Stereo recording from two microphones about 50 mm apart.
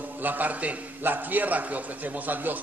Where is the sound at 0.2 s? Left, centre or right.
Right.